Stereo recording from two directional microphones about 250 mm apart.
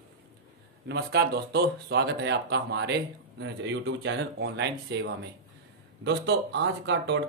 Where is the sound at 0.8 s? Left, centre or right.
Right.